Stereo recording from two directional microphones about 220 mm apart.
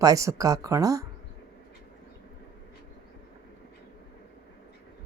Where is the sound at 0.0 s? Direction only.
15° right (ahead or behind).